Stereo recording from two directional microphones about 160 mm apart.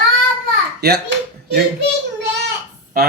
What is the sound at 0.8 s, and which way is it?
Speech, 90° right.